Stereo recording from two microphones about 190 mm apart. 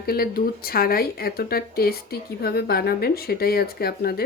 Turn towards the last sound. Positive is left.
turn(degrees=55)  # may be behind; listen again after turning